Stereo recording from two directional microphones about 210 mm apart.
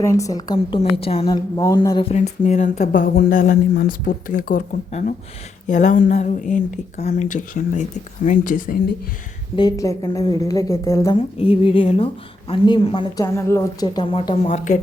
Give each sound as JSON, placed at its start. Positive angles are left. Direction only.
{"t": 0.0, "sound": "a woman's voice", "side_deg": 15}
{"t": 2.0, "sound": "a woman's voice", "side_deg": 35}
{"t": 9.6, "sound": "a woman's voice", "side_deg": 15}
{"t": 11.3, "sound": "speech", "side_deg": 25}